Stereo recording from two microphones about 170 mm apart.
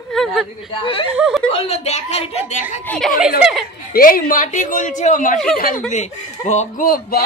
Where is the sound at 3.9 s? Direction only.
55° left (ahead or behind).